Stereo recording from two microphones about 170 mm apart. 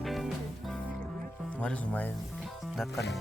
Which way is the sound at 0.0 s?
Centre (ahead or behind).